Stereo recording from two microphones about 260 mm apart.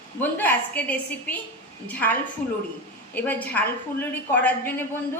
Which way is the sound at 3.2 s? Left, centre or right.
Centre.